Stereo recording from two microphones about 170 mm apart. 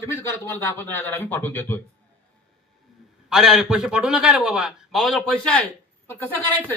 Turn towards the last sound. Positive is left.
turn(degrees=10)  # may be behind; listen again after turning